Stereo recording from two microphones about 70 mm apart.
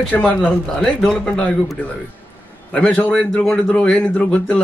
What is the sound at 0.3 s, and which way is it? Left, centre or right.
Speech, centre.